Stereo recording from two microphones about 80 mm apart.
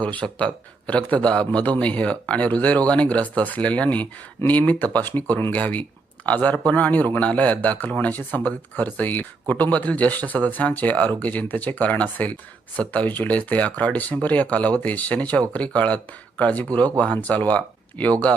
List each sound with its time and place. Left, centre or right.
0.0 s speech: centre